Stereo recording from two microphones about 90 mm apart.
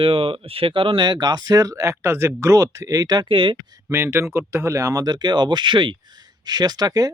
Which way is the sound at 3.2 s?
70° right (ahead or behind).